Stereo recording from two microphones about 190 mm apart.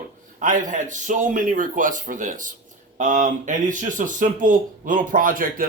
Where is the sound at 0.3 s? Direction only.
45° right (ahead or behind).